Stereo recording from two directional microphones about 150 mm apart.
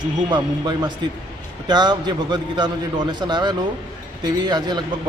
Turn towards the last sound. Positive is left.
turn(degrees=-30)  # may be behind; listen again after turning